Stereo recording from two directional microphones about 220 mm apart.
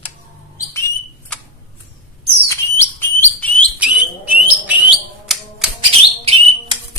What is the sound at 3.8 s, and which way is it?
Bird, 5° right (ahead or behind).